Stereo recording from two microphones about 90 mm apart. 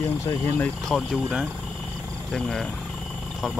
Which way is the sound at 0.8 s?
Centre (ahead or behind).